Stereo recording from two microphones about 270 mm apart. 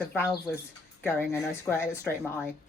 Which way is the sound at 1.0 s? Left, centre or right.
Centre.